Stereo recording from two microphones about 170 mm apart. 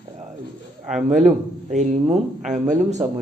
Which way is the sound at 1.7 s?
45° right (ahead or behind).